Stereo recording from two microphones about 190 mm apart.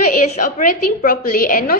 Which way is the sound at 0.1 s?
45° left (ahead or behind).